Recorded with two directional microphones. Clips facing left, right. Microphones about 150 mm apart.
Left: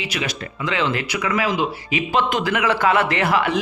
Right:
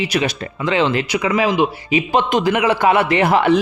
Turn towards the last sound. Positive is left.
turn(degrees=-25)  # may be behind; listen again after turning